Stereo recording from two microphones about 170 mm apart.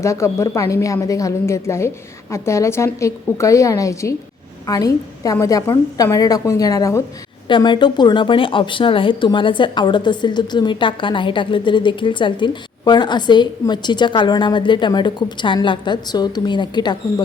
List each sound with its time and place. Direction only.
0.0 s a woman's voice: 15° left (ahead or behind)